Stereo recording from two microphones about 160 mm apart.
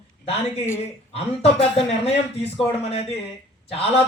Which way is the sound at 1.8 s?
40° left (ahead or behind).